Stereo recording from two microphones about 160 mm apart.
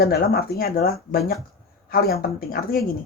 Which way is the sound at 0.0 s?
75° left (ahead or behind).